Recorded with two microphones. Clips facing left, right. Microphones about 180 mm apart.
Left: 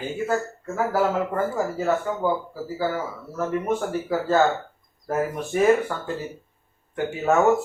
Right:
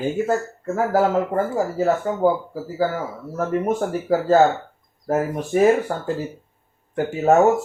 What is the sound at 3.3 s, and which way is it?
Speech, 45° right (ahead or behind).